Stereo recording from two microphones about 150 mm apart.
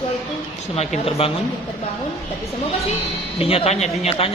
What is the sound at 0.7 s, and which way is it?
Speech, 40° left (ahead or behind).